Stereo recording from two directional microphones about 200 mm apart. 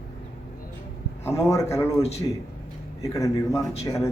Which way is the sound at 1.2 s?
15° left (ahead or behind).